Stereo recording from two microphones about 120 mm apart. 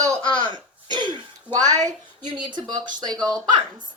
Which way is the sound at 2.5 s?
40° right (ahead or behind).